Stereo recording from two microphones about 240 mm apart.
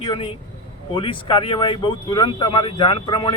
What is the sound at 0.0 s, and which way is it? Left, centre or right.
Speech, left.